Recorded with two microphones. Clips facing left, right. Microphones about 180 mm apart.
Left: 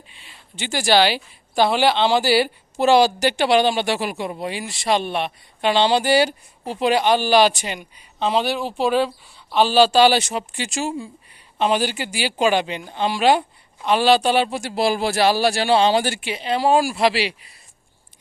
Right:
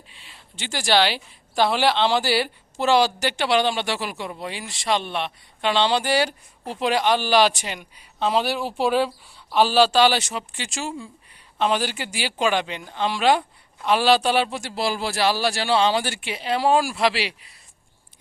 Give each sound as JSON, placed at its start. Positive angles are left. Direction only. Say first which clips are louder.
{"t": 0.1, "sound": "speech", "louder": "left 2 dB", "side_deg": 0}
{"t": 15.2, "sound": "a man's voice", "louder": "left 4 dB", "side_deg": 50}
{"t": 16.2, "sound": "speech", "louder": "left 2 dB", "side_deg": -5}